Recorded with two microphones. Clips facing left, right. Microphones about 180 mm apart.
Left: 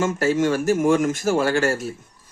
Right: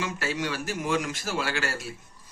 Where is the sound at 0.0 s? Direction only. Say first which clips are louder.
Left 11 dB; 45° left (ahead or behind).